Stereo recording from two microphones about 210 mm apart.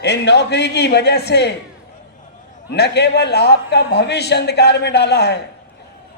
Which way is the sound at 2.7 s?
55° left (ahead or behind).